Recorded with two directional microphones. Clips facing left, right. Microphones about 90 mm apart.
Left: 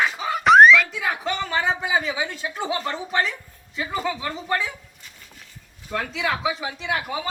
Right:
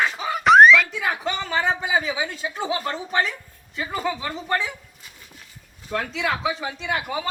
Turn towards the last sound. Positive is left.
turn(degrees=0)  # may be behind; listen again after turning